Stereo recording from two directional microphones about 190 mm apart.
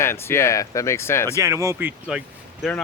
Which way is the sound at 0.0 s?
15° left (ahead or behind).